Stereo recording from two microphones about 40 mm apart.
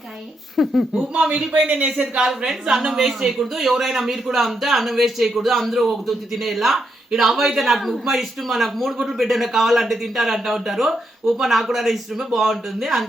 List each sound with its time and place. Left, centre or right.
0.5 s speech: centre
1.5 s a man's voice: right
2.1 s speech: centre